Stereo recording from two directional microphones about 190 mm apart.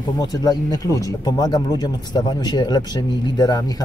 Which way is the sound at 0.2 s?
20° left (ahead or behind).